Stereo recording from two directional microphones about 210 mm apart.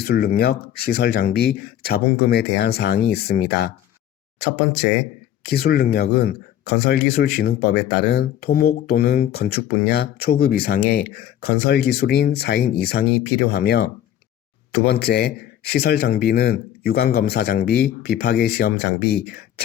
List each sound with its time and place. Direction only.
0.0 s speech: 45° left (ahead or behind)